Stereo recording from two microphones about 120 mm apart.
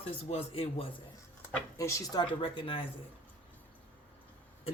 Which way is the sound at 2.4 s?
45° left (ahead or behind).